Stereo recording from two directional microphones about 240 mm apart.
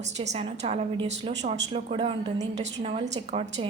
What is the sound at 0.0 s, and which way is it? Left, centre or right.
A woman's voice, right.